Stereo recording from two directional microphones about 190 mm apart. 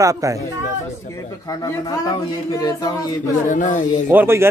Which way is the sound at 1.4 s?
20° left (ahead or behind).